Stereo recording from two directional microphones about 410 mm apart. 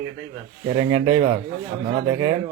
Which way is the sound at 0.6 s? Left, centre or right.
Centre.